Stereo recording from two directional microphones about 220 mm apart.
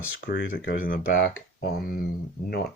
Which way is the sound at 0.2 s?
45° left (ahead or behind).